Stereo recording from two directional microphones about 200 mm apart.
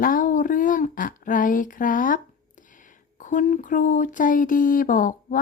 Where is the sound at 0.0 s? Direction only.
45° left (ahead or behind).